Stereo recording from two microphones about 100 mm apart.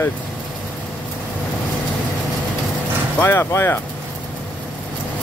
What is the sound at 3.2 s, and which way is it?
Speech, 25° left (ahead or behind).